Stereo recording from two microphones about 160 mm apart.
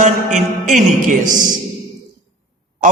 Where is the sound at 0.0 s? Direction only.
50° right (ahead or behind).